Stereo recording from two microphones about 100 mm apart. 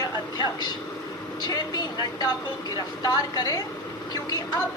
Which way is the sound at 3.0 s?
40° left (ahead or behind).